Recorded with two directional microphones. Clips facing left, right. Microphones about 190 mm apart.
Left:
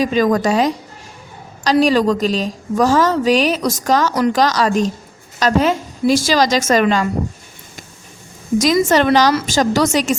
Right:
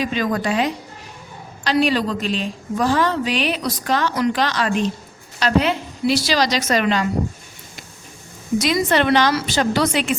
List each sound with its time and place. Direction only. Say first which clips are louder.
0.0 s a woman's voice: left 6 dB; 40° left (ahead or behind)
8.5 s a woman's voice: left 4 dB; 45° left (ahead or behind)